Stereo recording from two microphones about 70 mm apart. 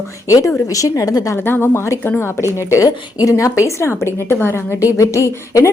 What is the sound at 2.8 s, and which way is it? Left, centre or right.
A woman's voice, left.